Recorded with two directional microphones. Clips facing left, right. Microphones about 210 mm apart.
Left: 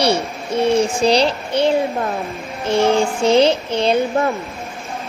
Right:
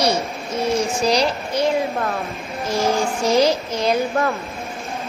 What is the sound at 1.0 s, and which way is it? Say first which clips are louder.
Child singing: left 3 dB; 30° left (ahead or behind).